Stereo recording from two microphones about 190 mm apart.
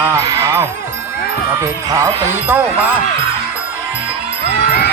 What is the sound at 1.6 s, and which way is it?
Speech, 15° right (ahead or behind).